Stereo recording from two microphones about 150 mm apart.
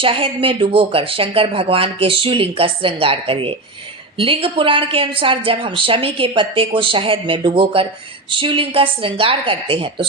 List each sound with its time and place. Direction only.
0.0 s a woman's voice: 35° right (ahead or behind)